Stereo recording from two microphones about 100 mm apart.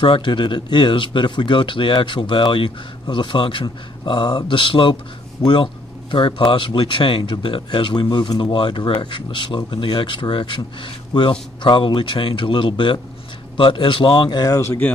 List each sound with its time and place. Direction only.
0.0 s speech: 55° left (ahead or behind)
14.6 s speech: 25° left (ahead or behind)